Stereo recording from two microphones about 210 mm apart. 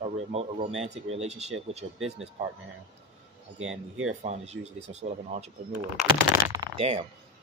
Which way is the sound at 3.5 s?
75° right (ahead or behind).